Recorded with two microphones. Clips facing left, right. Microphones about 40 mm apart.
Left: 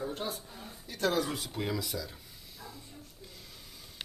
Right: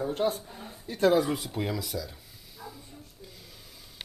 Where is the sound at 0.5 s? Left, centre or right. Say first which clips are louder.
Right 5 dB; right.